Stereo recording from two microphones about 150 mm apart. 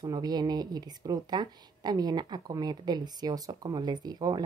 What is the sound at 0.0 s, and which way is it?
Speech, 25° right (ahead or behind).